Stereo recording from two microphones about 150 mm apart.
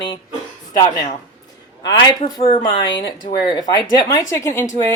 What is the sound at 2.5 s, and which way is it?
Speech, 30° left (ahead or behind).